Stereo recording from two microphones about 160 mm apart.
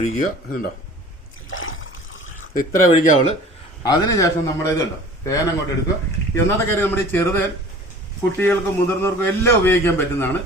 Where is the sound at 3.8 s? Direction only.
20° left (ahead or behind).